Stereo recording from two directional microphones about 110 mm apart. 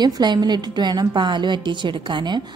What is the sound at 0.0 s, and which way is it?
A woman's voice, 40° right (ahead or behind).